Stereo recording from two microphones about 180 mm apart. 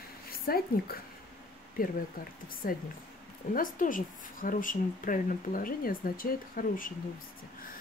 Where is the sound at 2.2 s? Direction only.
50° left (ahead or behind).